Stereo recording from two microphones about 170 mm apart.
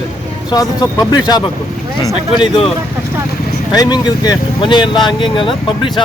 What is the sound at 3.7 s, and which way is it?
Speech, 25° left (ahead or behind).